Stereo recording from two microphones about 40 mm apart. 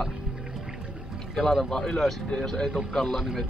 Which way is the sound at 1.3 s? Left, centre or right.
Centre.